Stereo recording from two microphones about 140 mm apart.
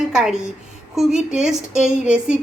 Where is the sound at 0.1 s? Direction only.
5° right (ahead or behind).